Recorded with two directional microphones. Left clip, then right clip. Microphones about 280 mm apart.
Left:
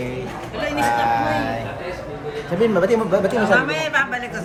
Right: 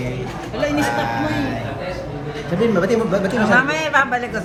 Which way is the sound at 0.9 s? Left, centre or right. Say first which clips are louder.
Left 2 dB; centre.